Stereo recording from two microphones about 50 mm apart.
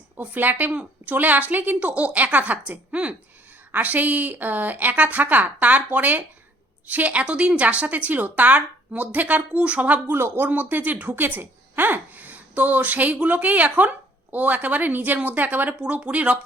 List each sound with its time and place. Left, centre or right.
0.2 s a woman's voice: right
10.2 s speech: right
10.5 s a woman's voice: right
15.9 s speech: right